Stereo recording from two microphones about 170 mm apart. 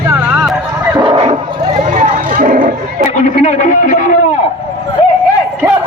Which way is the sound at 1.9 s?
45° right (ahead or behind).